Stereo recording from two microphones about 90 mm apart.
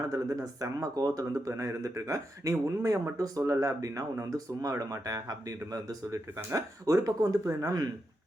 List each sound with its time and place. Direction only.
0.1 s speech: 40° right (ahead or behind)